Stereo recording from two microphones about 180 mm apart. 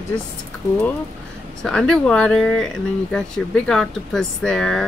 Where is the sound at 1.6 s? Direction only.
5° left (ahead or behind).